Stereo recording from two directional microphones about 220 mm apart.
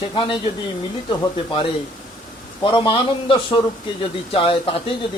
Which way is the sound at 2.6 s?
20° left (ahead or behind).